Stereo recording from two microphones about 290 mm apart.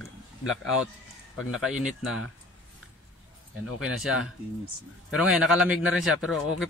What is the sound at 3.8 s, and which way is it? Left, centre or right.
A man's voice, centre.